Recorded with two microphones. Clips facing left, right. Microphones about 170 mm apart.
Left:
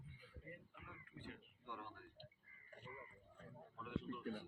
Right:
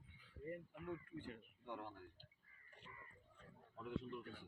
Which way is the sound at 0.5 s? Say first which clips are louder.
Right 11 dB; 45° right (ahead or behind).